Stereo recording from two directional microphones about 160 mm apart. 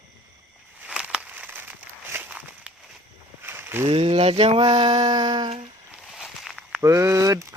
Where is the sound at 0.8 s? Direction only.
5° right (ahead or behind).